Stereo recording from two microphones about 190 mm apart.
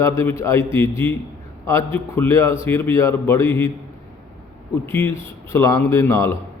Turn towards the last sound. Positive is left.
turn(degrees=15)  # may be behind; listen again after turning